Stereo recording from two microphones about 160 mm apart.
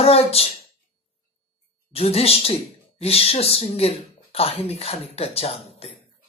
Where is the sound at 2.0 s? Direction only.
40° left (ahead or behind).